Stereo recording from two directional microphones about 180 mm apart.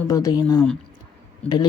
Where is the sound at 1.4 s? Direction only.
25° left (ahead or behind).